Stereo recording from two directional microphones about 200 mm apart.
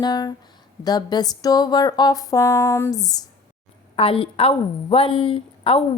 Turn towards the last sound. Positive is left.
turn(degrees=25)  # may be behind; listen again after turning